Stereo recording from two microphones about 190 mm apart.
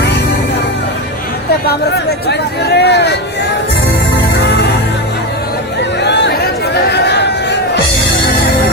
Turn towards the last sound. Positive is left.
turn(degrees=60)  # may be behind; listen again after turning